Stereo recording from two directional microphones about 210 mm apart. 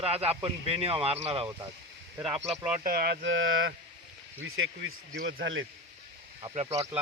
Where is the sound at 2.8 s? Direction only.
45° right (ahead or behind); by 5.6 s 65° right (ahead or behind).